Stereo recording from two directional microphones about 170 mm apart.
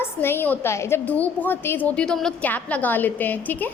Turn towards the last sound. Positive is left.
turn(degrees=10)  # may be behind; listen again after turning